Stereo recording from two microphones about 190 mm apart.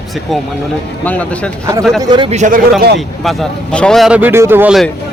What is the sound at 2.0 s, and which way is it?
Speech, 20° right (ahead or behind).